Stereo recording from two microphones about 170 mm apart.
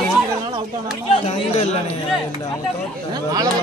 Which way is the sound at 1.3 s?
40° left (ahead or behind).